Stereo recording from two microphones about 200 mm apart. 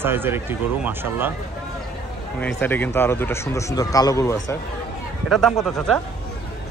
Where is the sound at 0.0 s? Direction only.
10° right (ahead or behind).